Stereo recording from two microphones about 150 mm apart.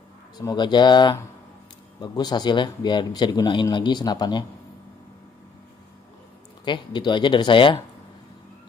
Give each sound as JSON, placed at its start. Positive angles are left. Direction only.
{"t": 0.4, "sound": "speech", "side_deg": 30}
{"t": 6.6, "sound": "speech", "side_deg": 30}